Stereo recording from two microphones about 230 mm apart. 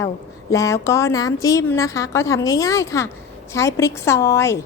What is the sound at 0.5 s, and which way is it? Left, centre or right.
A woman's voice, centre.